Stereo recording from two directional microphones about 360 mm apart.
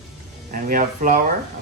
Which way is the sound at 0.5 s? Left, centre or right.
Right.